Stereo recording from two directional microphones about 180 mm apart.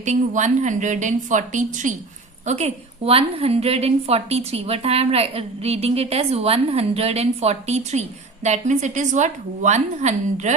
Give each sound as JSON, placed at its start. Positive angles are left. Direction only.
{"t": 0.0, "sound": "a woman's voice", "side_deg": -40}